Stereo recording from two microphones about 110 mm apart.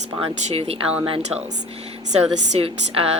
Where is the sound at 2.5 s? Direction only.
60° right (ahead or behind).